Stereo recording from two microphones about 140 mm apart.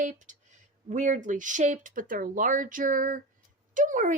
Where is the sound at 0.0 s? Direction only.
60° right (ahead or behind).